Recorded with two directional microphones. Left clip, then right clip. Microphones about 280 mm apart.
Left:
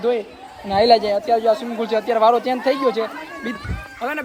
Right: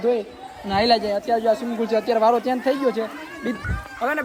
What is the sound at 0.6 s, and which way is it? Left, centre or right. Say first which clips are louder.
Speech: left 4 dB; right.